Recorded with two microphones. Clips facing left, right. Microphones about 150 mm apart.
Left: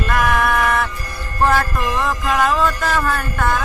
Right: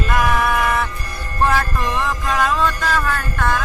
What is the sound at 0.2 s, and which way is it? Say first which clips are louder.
Music: left 1 dB; centre (ahead or behind).